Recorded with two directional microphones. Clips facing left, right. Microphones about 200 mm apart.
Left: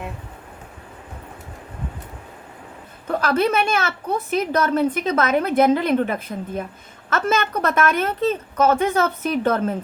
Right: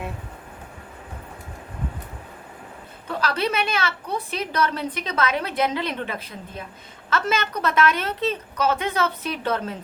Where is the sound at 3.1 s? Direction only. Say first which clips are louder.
Left 5 dB; 50° left (ahead or behind).